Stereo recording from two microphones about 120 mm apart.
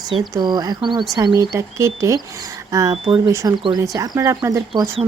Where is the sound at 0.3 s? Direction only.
35° right (ahead or behind).